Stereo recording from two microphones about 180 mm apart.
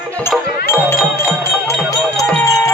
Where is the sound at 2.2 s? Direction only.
20° left (ahead or behind).